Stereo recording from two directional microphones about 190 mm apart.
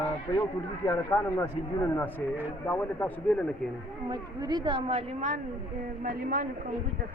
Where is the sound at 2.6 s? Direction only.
10° left (ahead or behind).